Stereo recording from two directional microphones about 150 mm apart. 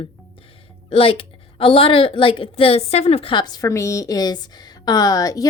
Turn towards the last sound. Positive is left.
turn(degrees=25)  # may be behind; listen again after turning